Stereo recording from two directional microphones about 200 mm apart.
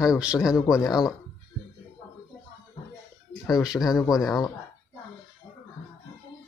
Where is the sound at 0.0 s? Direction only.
5° right (ahead or behind).